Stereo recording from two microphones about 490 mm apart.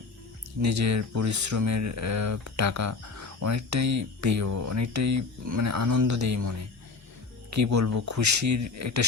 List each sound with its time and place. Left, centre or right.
0.6 s speech: right